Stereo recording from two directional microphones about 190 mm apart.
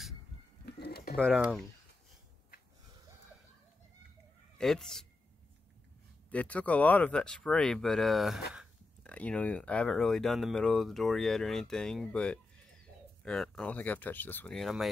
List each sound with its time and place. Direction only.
0.7 s bird: 55° left (ahead or behind)
1.1 s speech: centre (ahead or behind)
4.6 s speech: 5° left (ahead or behind)
6.3 s speech: 5° left (ahead or behind)